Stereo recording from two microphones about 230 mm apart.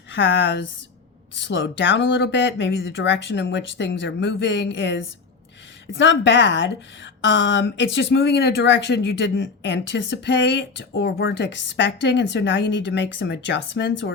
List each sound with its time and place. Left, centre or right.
0.1 s a woman's voice: left